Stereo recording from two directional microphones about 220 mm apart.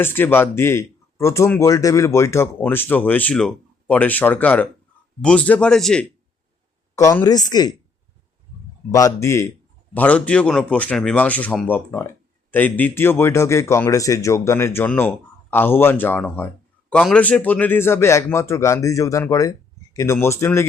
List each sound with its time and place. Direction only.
0.0 s speech: 10° left (ahead or behind)
6.9 s speech: 15° left (ahead or behind)
8.9 s speech: 15° left (ahead or behind)